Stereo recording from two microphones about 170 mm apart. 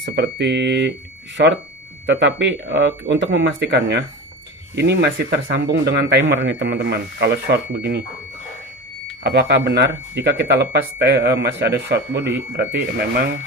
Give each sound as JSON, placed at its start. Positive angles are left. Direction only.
{"t": 0.0, "sound": "speech", "side_deg": -90}
{"t": 9.2, "sound": "speech", "side_deg": -75}